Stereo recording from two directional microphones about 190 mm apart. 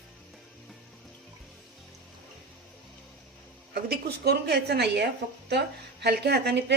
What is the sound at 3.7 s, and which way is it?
A woman's voice, 55° right (ahead or behind).